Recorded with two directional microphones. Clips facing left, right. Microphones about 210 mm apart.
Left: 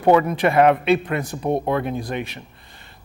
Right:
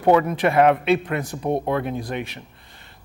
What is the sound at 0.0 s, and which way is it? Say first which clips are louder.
A man's voice: left 1 dB; 20° left (ahead or behind).